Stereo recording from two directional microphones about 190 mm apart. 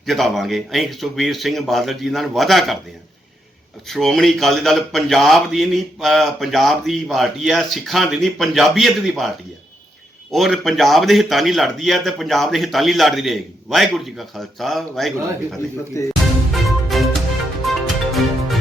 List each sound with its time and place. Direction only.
0.0 s a man's voice: centre (ahead or behind)
3.8 s a man's voice: centre (ahead or behind)
10.3 s a man's voice: centre (ahead or behind)
15.9 s speech: 15° left (ahead or behind)
16.6 s music: centre (ahead or behind)